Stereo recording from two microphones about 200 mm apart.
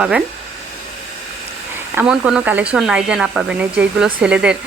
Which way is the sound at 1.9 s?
5° right (ahead or behind).